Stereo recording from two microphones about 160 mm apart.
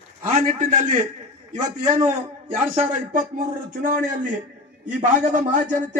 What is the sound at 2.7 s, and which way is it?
A man's voice, 55° right (ahead or behind).